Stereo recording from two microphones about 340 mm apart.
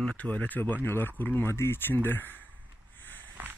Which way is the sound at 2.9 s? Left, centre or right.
Centre.